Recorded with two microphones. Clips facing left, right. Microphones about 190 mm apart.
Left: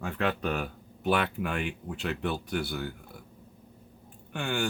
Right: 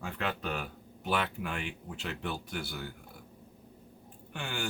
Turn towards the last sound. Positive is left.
turn(degrees=60)  # may be behind; listen again after turning